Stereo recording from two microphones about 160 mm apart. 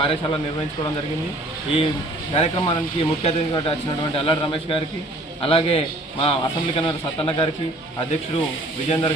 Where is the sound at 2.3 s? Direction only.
35° left (ahead or behind).